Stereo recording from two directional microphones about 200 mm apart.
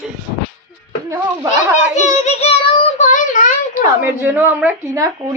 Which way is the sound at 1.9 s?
30° left (ahead or behind).